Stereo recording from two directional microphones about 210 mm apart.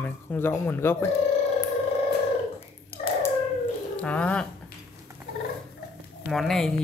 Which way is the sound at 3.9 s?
5° left (ahead or behind).